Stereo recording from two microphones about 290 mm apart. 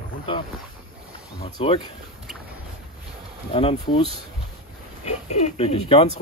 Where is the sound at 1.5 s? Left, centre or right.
Centre.